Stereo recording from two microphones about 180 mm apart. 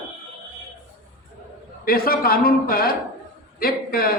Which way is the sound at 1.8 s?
55° left (ahead or behind).